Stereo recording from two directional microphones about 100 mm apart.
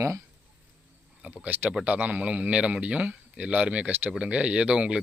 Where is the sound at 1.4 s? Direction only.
20° right (ahead or behind).